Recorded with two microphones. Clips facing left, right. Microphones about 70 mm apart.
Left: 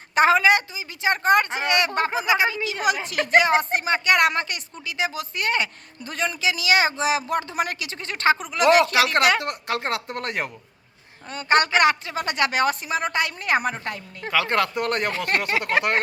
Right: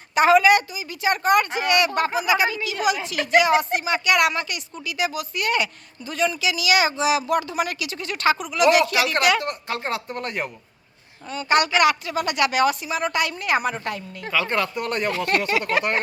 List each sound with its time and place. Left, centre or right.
0.1 s a woman's voice: left
2.8 s speech: left
9.4 s speech: left
11.3 s speech: left
14.3 s speech: left
15.3 s speech: left